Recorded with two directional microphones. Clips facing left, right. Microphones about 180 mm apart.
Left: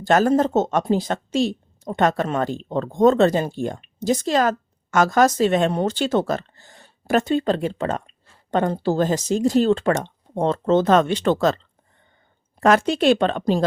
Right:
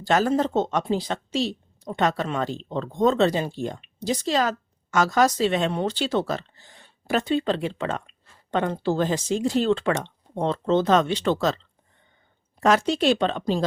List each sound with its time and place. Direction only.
0.0 s a woman's voice: 50° left (ahead or behind)